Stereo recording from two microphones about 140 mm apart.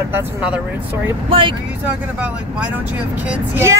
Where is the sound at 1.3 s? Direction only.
40° right (ahead or behind).